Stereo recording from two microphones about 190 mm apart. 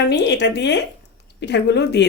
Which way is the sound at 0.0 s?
65° left (ahead or behind).